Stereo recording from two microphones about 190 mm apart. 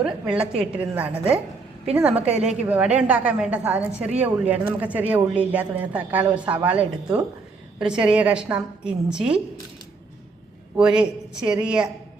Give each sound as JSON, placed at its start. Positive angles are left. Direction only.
{"t": 0.0, "sound": "a woman's voice", "side_deg": -5}
{"t": 2.3, "sound": "a woman's voice", "side_deg": -35}
{"t": 2.6, "sound": "a woman's voice", "side_deg": -5}
{"t": 10.8, "sound": "a woman's voice", "side_deg": -5}